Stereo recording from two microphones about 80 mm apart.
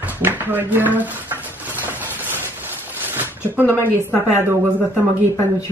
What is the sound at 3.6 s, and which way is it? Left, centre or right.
Speech, right.